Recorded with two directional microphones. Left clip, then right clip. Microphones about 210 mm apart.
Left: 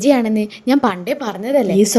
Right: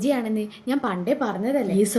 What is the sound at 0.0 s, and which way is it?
A woman's voice, 40° left (ahead or behind).